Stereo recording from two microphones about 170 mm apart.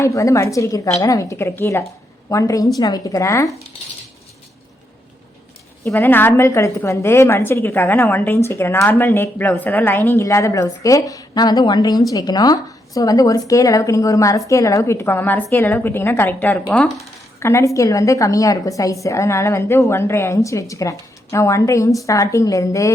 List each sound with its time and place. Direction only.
0.0 s a woman's voice: 20° left (ahead or behind)
5.8 s a woman's voice: 10° left (ahead or behind)